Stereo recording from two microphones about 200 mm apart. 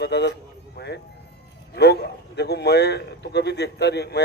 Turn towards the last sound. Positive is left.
turn(degrees=55)  # may be behind; listen again after turning